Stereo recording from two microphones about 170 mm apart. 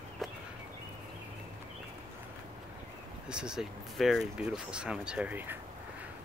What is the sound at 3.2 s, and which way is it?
Speech, 5° right (ahead or behind).